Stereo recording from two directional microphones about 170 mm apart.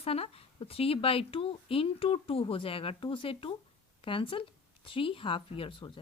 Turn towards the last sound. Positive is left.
turn(degrees=30)  # may be behind; listen again after turning